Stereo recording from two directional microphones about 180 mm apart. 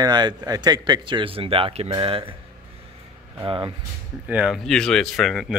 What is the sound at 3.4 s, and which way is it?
Speech, 25° right (ahead or behind).